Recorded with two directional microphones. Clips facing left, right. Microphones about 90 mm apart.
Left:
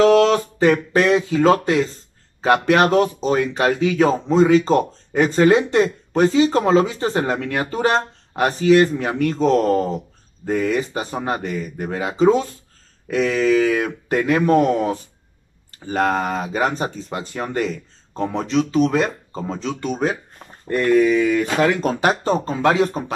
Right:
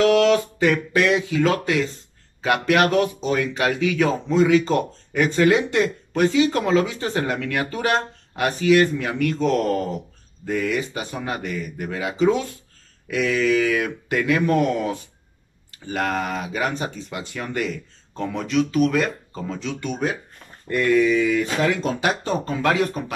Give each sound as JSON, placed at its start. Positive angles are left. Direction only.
{"t": 0.0, "sound": "speech", "side_deg": 35}
{"t": 21.1, "sound": "speech", "side_deg": 50}
{"t": 22.2, "sound": "speech", "side_deg": 30}